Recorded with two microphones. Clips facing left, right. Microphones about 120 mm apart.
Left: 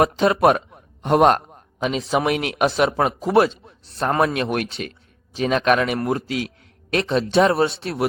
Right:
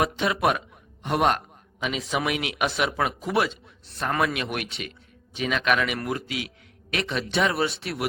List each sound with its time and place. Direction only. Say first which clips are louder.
0.0 s speech: left 7 dB; 40° left (ahead or behind)